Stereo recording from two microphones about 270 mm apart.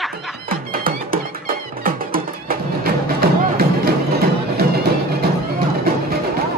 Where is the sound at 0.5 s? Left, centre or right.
Right.